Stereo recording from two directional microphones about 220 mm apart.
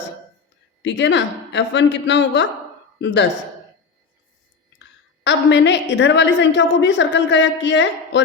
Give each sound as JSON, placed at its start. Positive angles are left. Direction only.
{"t": 0.8, "sound": "a woman's voice", "side_deg": 55}
{"t": 5.2, "sound": "a woman's voice", "side_deg": 55}